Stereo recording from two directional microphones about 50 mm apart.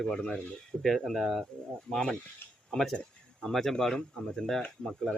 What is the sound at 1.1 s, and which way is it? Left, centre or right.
Speech, centre.